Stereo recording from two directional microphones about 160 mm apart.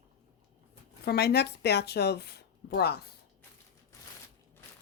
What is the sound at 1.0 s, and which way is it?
Speech, 90° left.